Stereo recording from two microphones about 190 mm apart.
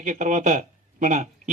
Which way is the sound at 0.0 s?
40° right (ahead or behind).